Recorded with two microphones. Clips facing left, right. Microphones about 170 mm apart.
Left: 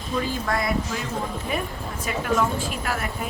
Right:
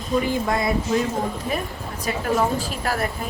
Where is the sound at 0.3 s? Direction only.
20° right (ahead or behind).